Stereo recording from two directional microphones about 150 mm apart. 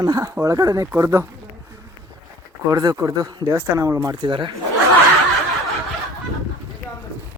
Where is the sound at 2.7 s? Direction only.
20° right (ahead or behind).